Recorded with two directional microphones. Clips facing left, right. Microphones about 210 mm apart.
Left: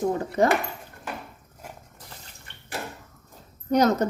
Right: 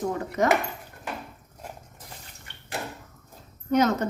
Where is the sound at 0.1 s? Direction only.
30° left (ahead or behind).